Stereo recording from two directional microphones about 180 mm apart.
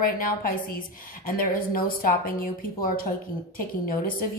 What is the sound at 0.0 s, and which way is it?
A woman's voice, 55° left (ahead or behind).